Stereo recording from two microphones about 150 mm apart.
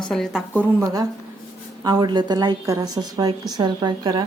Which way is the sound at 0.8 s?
25° right (ahead or behind).